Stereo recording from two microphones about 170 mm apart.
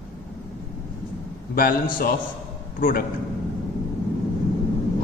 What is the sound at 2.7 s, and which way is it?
Speech, 55° left (ahead or behind).